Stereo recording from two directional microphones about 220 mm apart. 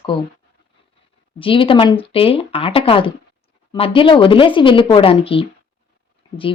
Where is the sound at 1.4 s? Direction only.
25° left (ahead or behind).